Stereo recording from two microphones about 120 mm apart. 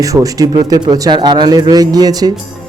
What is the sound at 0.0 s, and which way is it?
A man's voice, 30° right (ahead or behind).